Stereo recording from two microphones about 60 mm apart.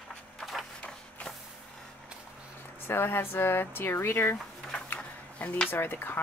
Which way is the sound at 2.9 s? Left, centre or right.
Left.